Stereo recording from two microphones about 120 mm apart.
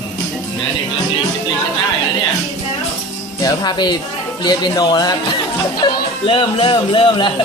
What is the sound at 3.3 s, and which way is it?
Speech, 35° left (ahead or behind).